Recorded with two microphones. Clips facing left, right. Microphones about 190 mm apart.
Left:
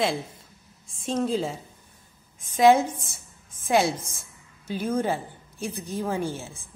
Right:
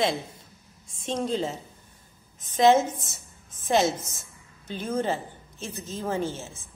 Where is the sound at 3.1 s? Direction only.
10° left (ahead or behind).